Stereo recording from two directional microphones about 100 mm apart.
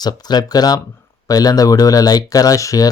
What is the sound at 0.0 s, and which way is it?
Speech, 45° left (ahead or behind).